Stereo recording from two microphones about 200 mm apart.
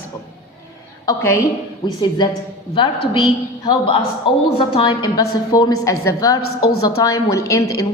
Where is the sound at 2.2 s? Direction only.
20° left (ahead or behind).